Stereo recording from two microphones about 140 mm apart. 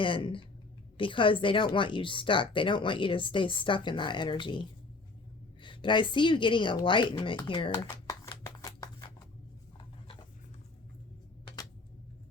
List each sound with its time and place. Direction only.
0.0 s speech: 35° left (ahead or behind)
5.6 s speech: 35° left (ahead or behind)
8.0 s shuffling cards: 20° left (ahead or behind)